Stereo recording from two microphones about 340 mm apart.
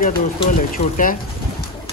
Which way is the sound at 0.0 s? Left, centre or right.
Left.